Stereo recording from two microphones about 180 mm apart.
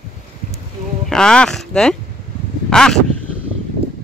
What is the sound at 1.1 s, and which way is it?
Child singing, 5° left (ahead or behind).